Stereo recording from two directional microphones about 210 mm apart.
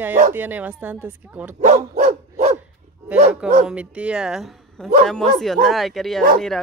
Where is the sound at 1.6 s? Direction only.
35° right (ahead or behind).